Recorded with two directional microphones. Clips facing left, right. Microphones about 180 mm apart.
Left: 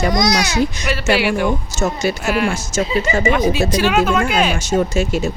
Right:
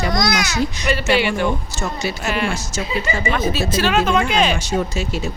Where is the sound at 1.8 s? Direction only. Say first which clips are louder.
Left 7 dB; 45° left (ahead or behind).